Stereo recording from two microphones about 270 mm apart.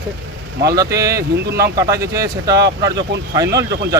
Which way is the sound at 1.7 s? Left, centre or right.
Centre.